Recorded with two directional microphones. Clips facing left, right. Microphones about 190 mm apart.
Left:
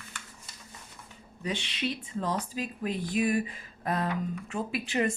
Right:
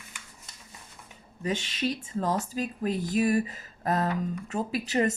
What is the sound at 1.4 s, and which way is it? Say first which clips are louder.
Speech: right 3 dB; 45° right (ahead or behind).